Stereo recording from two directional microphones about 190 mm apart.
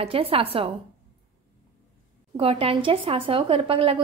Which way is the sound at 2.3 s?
30° right (ahead or behind).